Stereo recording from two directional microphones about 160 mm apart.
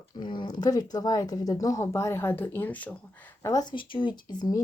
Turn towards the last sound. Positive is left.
turn(degrees=30)  # may be behind; listen again after turning